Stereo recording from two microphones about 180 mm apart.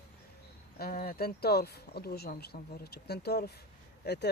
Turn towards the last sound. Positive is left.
turn(degrees=65)  # may be behind; listen again after turning